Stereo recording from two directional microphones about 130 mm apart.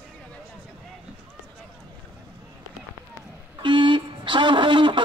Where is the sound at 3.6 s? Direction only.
40° right (ahead or behind).